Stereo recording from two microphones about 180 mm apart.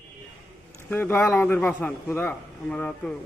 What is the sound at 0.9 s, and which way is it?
A man's voice, 10° left (ahead or behind).